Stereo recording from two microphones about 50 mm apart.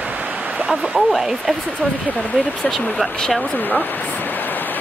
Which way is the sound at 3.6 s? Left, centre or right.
Left.